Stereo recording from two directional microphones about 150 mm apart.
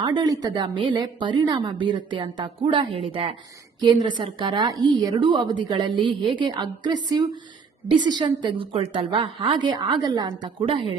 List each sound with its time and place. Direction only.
0.0 s a woman's voice: 30° right (ahead or behind)